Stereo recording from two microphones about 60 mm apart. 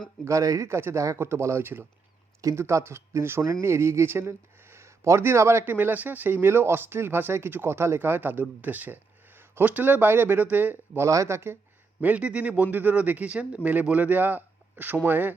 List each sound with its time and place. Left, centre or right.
0.3 s speech: right
0.7 s speech: right
2.6 s speech: right
5.6 s speech: right
9.6 s speech: right
11.0 s speech: right
11.9 s speech: right